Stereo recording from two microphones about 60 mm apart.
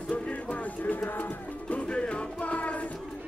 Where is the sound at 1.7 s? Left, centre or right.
Centre.